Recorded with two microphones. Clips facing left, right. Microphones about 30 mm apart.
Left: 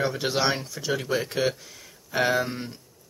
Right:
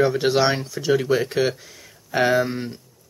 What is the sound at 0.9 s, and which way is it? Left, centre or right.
Speech, centre.